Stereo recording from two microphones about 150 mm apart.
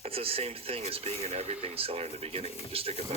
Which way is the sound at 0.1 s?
40° right (ahead or behind).